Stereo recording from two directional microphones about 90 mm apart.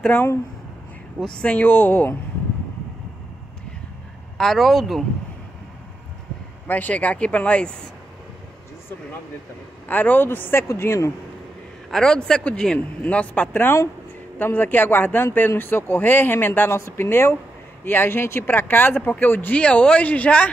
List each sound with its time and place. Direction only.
1.4 s a man's voice: 15° left (ahead or behind)
4.4 s speech: centre (ahead or behind)
6.7 s speech: 15° left (ahead or behind)
9.8 s a man's voice: 20° left (ahead or behind)
11.9 s a man's voice: 10° left (ahead or behind)